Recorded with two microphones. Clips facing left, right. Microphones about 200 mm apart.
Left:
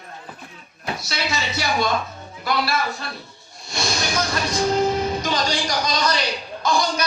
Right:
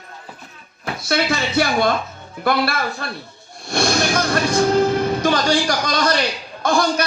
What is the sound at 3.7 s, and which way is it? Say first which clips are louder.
Music: right 7 dB; 55° right (ahead or behind).